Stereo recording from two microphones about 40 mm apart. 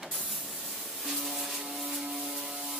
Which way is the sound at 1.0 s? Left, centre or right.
Centre.